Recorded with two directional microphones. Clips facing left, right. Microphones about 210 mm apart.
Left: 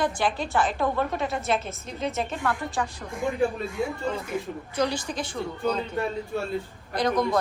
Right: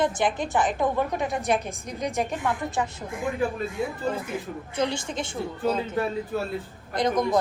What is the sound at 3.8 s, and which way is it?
Speech, centre (ahead or behind).